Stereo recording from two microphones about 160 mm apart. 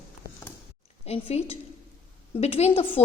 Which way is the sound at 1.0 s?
40° left (ahead or behind).